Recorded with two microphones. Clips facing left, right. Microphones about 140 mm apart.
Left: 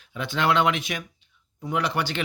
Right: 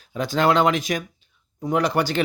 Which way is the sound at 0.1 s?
40° right (ahead or behind).